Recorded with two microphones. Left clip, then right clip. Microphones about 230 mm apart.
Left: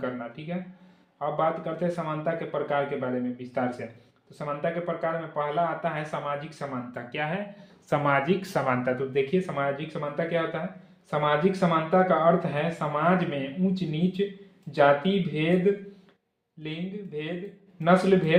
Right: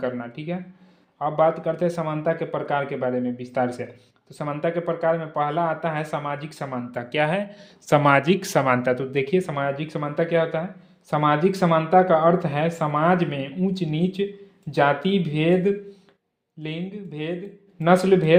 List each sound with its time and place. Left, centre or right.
0.0 s speech: right